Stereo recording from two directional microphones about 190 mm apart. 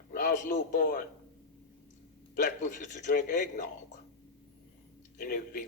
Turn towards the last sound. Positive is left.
turn(degrees=50)  # may be behind; listen again after turning